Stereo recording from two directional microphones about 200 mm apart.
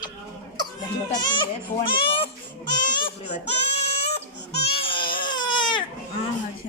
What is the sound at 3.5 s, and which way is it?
Child singing, 30° left (ahead or behind).